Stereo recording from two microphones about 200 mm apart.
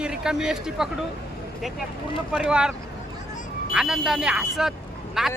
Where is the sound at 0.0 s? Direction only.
5° right (ahead or behind).